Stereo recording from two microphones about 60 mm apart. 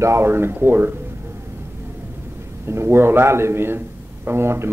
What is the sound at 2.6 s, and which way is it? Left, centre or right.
A man's voice, right.